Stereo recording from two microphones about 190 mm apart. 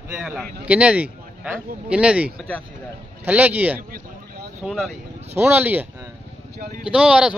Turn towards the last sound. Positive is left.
turn(degrees=-5)  # may be behind; listen again after turning